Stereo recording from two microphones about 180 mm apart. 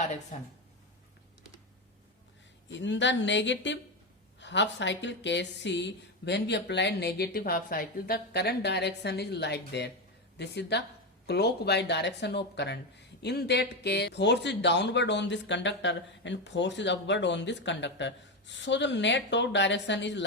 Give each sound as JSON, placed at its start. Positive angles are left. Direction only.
{"t": 0.0, "sound": "a woman's voice", "side_deg": 40}
{"t": 2.6, "sound": "a woman's voice", "side_deg": 85}